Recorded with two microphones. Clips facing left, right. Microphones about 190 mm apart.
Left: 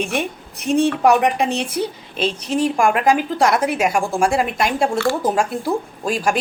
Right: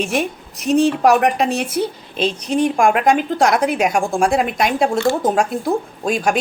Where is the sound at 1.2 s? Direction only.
65° right (ahead or behind).